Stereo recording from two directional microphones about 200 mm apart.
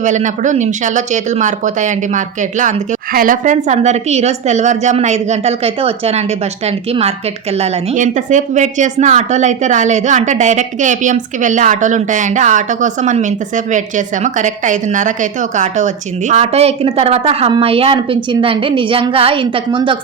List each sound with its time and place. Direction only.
0.0 s speech: 35° right (ahead or behind)